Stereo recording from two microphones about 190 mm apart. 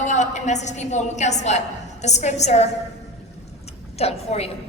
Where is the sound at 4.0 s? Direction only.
35° left (ahead or behind).